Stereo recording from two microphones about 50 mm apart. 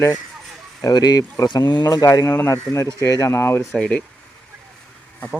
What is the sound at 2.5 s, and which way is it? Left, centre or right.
Speech, left.